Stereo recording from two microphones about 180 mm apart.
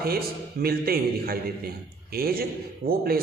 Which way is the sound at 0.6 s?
55° right (ahead or behind).